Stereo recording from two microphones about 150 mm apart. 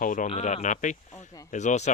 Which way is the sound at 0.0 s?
65° left (ahead or behind).